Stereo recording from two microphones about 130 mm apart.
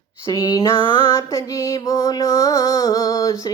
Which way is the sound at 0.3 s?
25° left (ahead or behind).